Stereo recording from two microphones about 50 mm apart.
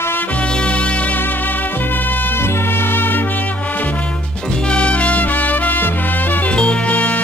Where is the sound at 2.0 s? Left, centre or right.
Left.